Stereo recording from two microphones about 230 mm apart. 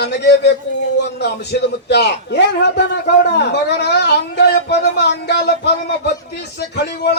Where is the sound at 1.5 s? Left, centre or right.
Left.